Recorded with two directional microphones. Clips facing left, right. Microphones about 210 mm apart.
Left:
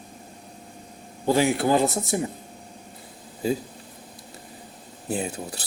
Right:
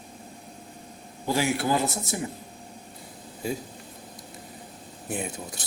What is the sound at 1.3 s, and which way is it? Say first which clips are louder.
Speech: left 5 dB; 20° left (ahead or behind).